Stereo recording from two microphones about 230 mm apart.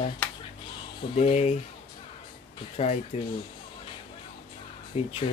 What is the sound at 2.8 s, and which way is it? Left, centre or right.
Speech, left.